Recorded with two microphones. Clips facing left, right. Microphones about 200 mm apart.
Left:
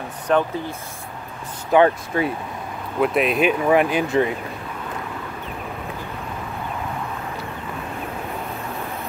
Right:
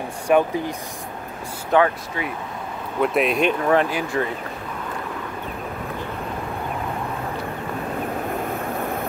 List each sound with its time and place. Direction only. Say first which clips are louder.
0.3 s speech: right 2 dB; 10° right (ahead or behind)
1.7 s speech: left 3 dB; 10° left (ahead or behind)
2.1 s speech: left 8 dB; 50° left (ahead or behind)
3.0 s speech: left 1 dB; centre (ahead or behind); by 4.3 s 20° left (ahead or behind)